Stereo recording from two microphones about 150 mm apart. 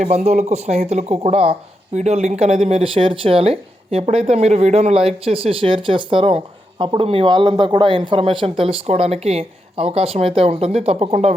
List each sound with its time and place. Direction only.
0.0 s speech: 50° right (ahead or behind)